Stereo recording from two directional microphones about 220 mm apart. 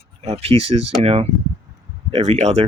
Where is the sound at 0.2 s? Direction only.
25° right (ahead or behind).